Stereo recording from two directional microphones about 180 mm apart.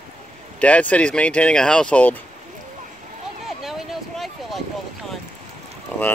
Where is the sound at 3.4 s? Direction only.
Centre (ahead or behind).